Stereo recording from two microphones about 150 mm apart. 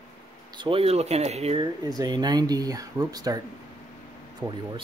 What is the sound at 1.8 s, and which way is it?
Speech, 25° right (ahead or behind).